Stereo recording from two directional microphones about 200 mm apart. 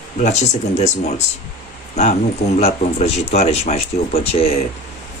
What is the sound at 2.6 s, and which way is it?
Speech, 30° left (ahead or behind).